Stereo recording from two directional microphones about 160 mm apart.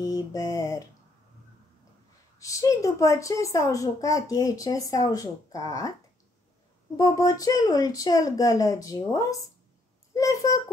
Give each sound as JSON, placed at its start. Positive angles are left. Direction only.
{"t": 0.0, "sound": "a child's voice", "side_deg": 20}
{"t": 2.3, "sound": "a child's voice", "side_deg": 20}
{"t": 7.0, "sound": "a child's voice", "side_deg": 25}